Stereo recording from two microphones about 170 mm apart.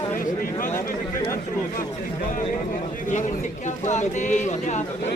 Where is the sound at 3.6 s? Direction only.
45° left (ahead or behind).